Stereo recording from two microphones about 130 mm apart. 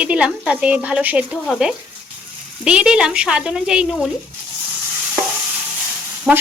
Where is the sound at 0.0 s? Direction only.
10° right (ahead or behind).